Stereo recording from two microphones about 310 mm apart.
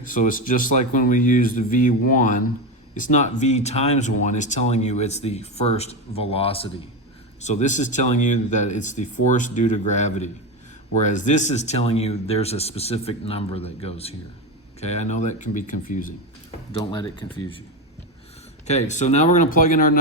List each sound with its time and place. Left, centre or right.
0.0 s speech: left
16.8 s speech: centre
18.7 s speech: left